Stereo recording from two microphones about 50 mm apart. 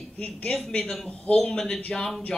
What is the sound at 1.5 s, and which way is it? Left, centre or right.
Speech, centre.